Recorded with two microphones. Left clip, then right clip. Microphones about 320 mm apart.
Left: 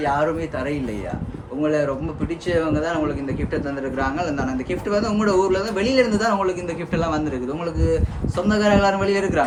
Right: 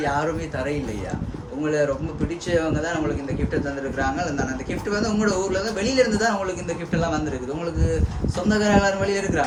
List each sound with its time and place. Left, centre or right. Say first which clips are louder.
0.0 s a man's voice: left 3 dB; centre